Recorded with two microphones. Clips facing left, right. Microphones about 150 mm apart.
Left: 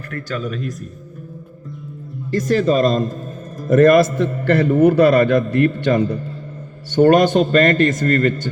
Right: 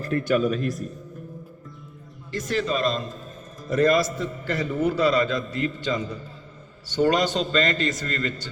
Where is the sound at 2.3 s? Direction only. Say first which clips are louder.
Left 10 dB; 45° left (ahead or behind).